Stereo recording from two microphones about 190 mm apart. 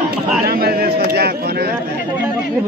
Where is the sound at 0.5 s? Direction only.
55° right (ahead or behind).